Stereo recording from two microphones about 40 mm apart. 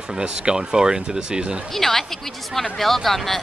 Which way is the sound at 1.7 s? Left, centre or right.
Centre.